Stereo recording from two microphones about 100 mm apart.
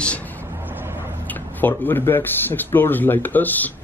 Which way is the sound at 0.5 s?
20° right (ahead or behind).